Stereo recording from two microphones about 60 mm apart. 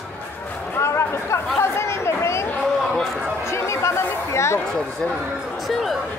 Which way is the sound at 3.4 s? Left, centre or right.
Left.